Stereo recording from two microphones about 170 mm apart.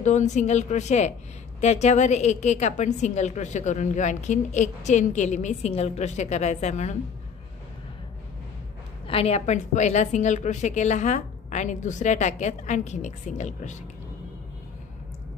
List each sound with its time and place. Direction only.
0.0 s a woman's voice: 45° left (ahead or behind)
9.0 s a woman's voice: 35° left (ahead or behind)